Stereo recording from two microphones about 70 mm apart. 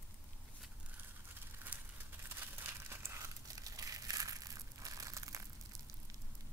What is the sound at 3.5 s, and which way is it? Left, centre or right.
Crushing, right.